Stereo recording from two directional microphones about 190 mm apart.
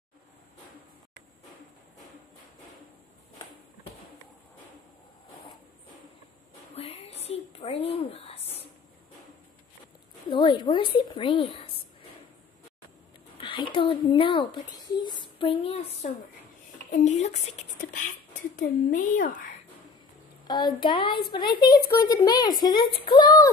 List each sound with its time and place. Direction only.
6.7 s a sound: 30° left (ahead or behind)
10.3 s a woman's voice: 25° left (ahead or behind)
13.4 s speech: 25° left (ahead or behind); by 19.4 s 45° left (ahead or behind)
20.4 s a woman's voice: 20° left (ahead or behind)